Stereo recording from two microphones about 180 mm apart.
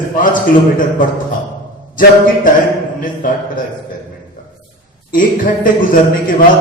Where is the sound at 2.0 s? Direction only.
50° left (ahead or behind).